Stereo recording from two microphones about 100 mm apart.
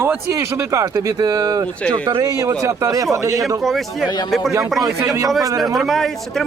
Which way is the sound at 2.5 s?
35° right (ahead or behind).